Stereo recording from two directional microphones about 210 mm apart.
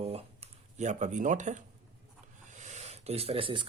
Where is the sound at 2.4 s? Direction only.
35° right (ahead or behind).